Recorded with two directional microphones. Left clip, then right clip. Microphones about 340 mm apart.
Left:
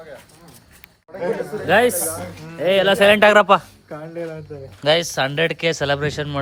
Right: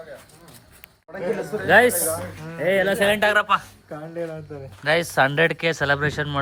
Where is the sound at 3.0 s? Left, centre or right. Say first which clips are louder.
Left 7 dB; centre.